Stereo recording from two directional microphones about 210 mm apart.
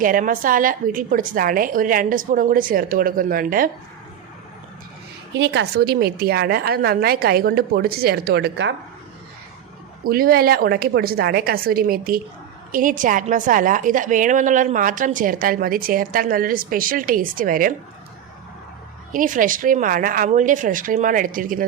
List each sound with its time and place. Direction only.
0.0 s a woman's voice: 40° right (ahead or behind)
5.3 s a woman's voice: 60° right (ahead or behind)
10.0 s a woman's voice: 45° right (ahead or behind)
19.1 s a woman's voice: 40° right (ahead or behind)